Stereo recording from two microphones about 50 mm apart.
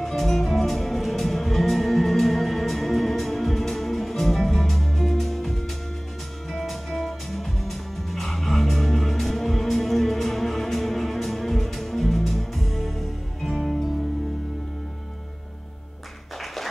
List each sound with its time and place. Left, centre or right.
0.0 s music: centre